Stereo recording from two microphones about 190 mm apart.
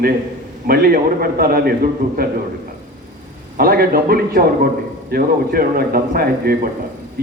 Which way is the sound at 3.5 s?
50° right (ahead or behind).